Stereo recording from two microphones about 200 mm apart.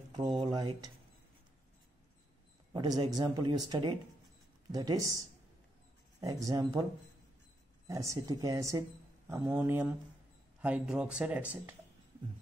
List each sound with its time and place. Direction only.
0.1 s speech: 20° right (ahead or behind)
2.7 s speech: 20° right (ahead or behind)
6.2 s speech: 20° right (ahead or behind)
7.9 s speech: 15° right (ahead or behind)